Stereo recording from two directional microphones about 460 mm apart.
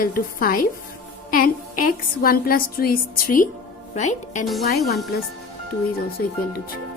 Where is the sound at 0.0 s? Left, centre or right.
Centre.